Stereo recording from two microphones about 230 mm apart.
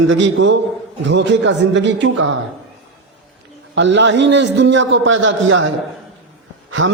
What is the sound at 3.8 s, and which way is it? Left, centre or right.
A man's voice, right.